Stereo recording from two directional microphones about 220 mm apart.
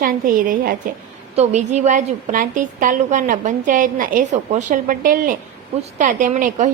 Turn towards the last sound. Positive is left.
turn(degrees=-35)  # may be behind; listen again after turning